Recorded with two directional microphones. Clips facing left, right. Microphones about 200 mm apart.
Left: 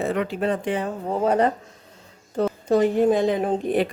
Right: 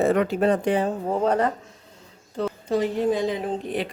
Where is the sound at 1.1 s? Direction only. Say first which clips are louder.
Left 2 dB; 5° left (ahead or behind).